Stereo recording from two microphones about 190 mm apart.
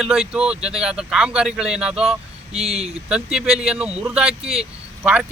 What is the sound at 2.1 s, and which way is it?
Speech, 30° right (ahead or behind).